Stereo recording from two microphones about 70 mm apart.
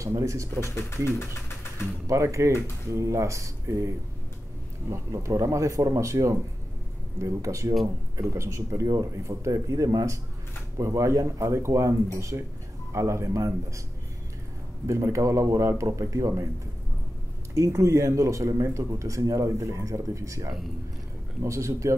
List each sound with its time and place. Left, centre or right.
0.0 s speech: right
2.0 s speech: right
14.9 s speech: right
17.6 s speech: right